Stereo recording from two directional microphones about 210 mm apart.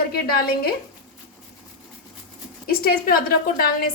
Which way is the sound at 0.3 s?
45° left (ahead or behind).